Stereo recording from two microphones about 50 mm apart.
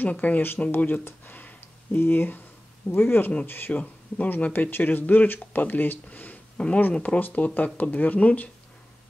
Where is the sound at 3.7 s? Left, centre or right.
Left.